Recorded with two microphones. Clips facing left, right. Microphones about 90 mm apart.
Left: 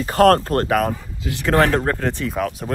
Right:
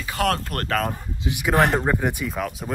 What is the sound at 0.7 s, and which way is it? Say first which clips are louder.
Speech: left 3 dB; 5° left (ahead or behind).